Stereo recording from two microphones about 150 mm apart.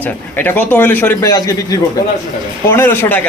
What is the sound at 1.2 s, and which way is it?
A man's voice, 25° left (ahead or behind).